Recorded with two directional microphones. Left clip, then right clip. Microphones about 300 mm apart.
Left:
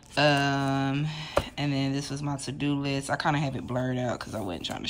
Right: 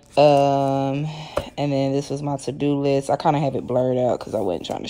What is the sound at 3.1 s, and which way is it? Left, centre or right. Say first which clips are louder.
Speech: right 8 dB; centre.